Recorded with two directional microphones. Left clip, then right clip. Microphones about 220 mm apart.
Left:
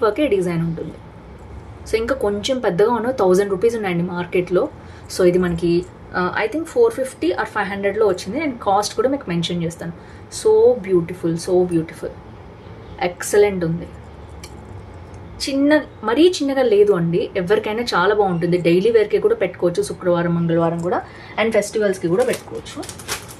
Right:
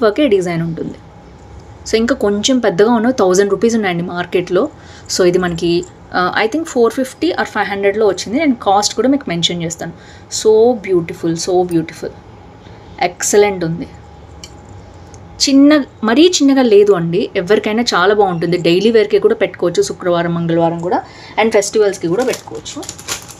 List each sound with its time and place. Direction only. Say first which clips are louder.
0.0 s speech: right 5 dB; 35° right (ahead or behind)
1.9 s speech: right 5 dB; 35° right (ahead or behind)
15.3 s speech: right 7 dB; 45° right (ahead or behind)